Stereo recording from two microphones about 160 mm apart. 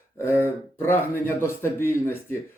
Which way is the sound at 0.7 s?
15° left (ahead or behind).